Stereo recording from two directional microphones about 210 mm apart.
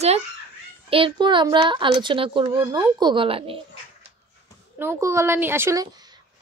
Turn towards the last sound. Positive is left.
turn(degrees=-20)  # may be behind; listen again after turning